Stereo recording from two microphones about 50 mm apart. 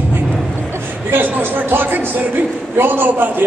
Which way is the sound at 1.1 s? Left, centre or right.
Right.